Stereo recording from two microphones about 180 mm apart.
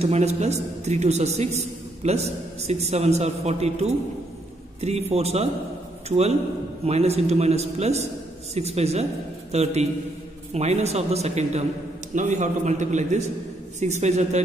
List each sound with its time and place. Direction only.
0.0 s a woman's voice: 35° right (ahead or behind)